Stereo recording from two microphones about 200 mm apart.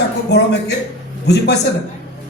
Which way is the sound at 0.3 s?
55° left (ahead or behind).